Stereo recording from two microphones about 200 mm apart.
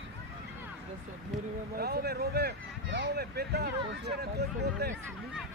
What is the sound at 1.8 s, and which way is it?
Speech, 50° right (ahead or behind).